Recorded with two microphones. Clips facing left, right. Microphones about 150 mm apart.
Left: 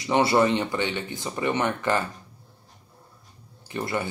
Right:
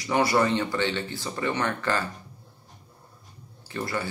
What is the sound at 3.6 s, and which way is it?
Speech, 20° left (ahead or behind).